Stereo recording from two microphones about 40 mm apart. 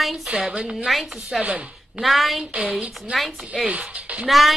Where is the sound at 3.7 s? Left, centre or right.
Right.